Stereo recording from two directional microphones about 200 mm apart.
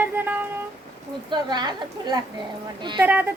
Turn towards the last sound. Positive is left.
turn(degrees=-10)  # may be behind; listen again after turning